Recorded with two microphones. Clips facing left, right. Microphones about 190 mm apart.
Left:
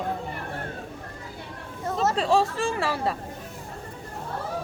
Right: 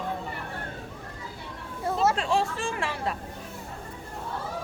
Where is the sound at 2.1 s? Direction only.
35° left (ahead or behind).